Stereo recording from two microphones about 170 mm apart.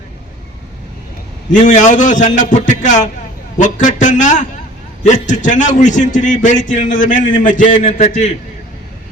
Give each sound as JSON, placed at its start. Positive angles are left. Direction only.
{"t": 1.6, "sound": "a man's voice", "side_deg": 45}